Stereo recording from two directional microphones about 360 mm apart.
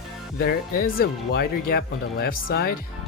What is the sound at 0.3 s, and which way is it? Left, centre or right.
Speech, left.